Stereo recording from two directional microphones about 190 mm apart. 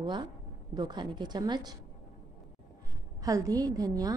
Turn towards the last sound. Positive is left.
turn(degrees=-20)  # may be behind; listen again after turning